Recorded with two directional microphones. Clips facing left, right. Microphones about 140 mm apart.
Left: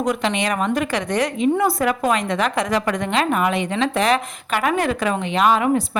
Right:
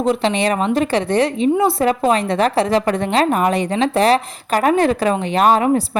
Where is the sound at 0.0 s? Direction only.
30° right (ahead or behind).